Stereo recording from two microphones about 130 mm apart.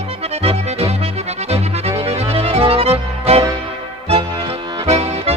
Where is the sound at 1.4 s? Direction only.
50° right (ahead or behind).